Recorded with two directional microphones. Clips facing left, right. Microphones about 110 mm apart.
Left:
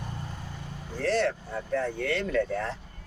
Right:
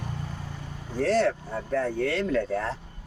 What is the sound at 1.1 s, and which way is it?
Speech, 40° right (ahead or behind).